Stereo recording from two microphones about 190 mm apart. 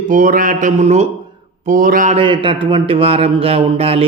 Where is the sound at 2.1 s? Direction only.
25° right (ahead or behind).